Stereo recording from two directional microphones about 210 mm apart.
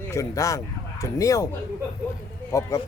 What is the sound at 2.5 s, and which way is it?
Speech, 15° left (ahead or behind).